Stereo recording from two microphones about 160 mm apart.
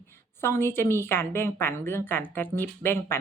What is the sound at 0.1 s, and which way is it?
Speech, 15° left (ahead or behind).